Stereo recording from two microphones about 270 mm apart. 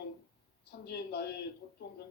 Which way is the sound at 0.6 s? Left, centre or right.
Left.